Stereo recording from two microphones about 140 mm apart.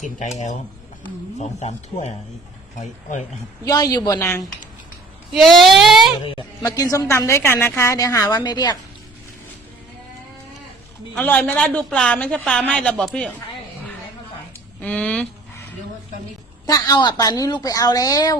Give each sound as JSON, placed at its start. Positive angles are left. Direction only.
{"t": 0.0, "sound": "speech", "side_deg": 60}
{"t": 3.6, "sound": "a woman's voice", "side_deg": 25}
{"t": 5.3, "sound": "speech", "side_deg": 0}
{"t": 6.6, "sound": "a woman's voice", "side_deg": 25}
{"t": 11.1, "sound": "a woman's voice", "side_deg": 10}
{"t": 14.8, "sound": "speech", "side_deg": 10}
{"t": 16.6, "sound": "a woman's voice", "side_deg": 25}